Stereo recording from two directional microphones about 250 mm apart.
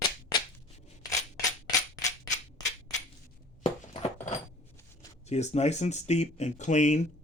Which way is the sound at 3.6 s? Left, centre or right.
Left.